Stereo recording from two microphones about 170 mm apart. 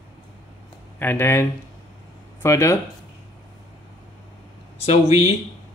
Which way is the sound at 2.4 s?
15° left (ahead or behind).